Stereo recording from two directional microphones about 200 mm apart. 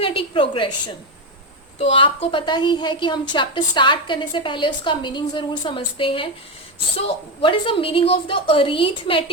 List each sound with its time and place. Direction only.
0.0 s a woman's voice: 25° left (ahead or behind)
1.8 s a woman's voice: 30° left (ahead or behind)
7.4 s a woman's voice: 25° left (ahead or behind)